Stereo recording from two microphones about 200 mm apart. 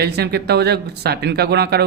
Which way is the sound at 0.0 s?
55° right (ahead or behind).